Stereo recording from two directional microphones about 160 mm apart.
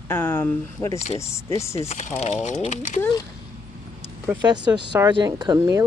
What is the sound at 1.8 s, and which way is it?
Speech, 45° left (ahead or behind).